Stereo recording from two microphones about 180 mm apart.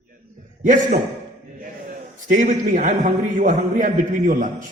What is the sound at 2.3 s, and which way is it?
A man's voice, 45° right (ahead or behind).